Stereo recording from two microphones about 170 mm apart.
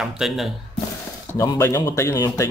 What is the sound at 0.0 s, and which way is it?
Speech, centre (ahead or behind).